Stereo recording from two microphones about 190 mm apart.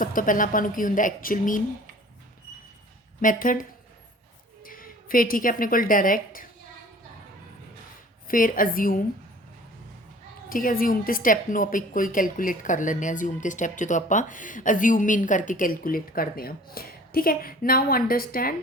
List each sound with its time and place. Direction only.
0.0 s a woman's voice: 45° left (ahead or behind)
3.2 s a woman's voice: 45° left (ahead or behind)
8.3 s a woman's voice: 45° left (ahead or behind)
10.5 s a woman's voice: 45° left (ahead or behind)